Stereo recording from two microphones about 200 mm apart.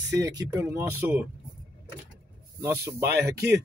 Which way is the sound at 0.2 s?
20° right (ahead or behind).